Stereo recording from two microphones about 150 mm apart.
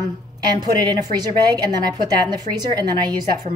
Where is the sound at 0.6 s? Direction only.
30° right (ahead or behind).